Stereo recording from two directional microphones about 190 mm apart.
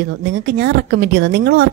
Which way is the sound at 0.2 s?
50° right (ahead or behind).